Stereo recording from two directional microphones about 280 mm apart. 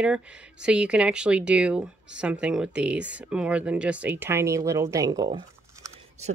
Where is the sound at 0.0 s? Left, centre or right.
Centre.